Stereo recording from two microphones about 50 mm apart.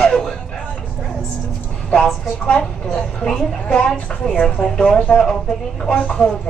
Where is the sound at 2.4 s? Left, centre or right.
Centre.